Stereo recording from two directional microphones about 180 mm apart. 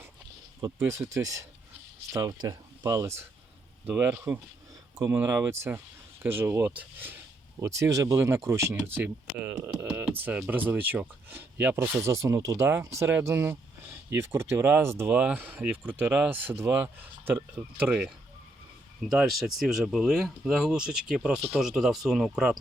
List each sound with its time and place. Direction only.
0.6 s speech: 15° right (ahead or behind)